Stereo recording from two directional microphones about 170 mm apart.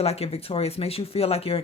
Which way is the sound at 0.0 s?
35° left (ahead or behind).